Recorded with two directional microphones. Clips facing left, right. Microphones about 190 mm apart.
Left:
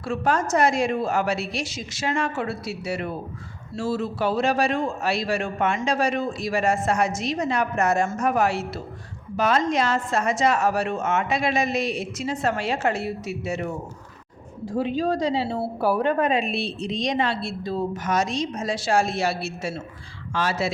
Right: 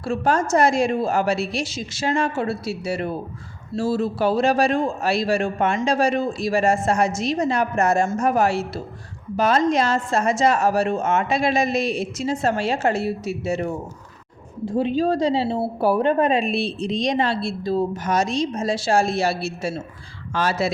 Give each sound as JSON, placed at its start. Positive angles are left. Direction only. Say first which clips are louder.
{"t": 0.0, "sound": "a man's voice", "louder": "right 3 dB", "side_deg": -30}